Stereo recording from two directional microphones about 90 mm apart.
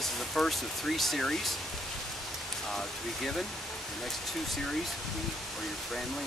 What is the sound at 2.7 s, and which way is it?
Speech, 5° left (ahead or behind).